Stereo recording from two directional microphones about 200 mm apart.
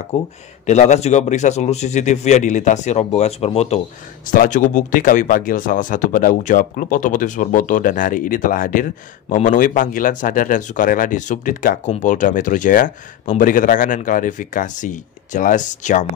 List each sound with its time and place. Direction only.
0.1 s speech: 35° left (ahead or behind)
4.3 s speech: 40° left (ahead or behind)